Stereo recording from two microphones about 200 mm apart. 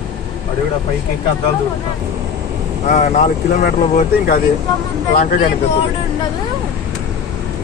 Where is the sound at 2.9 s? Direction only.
40° left (ahead or behind).